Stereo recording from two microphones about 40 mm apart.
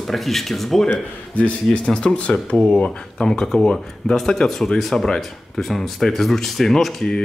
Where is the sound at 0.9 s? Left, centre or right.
Left.